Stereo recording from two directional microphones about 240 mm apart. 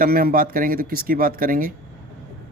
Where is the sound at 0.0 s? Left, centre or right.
Right.